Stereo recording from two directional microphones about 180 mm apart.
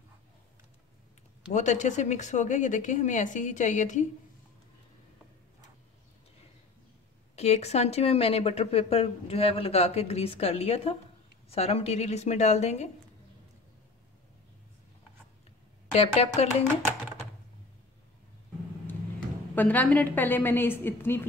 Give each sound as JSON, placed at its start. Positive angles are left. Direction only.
{"t": 1.5, "sound": "a woman's voice", "side_deg": 40}
{"t": 7.3, "sound": "speech", "side_deg": 35}
{"t": 15.9, "sound": "speech", "side_deg": 35}
{"t": 19.5, "sound": "a woman's voice", "side_deg": 10}